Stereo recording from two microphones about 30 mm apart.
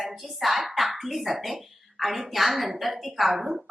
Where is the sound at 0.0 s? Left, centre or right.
Centre.